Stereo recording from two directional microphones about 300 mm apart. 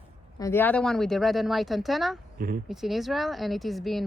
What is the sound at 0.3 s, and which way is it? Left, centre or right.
Speech, centre.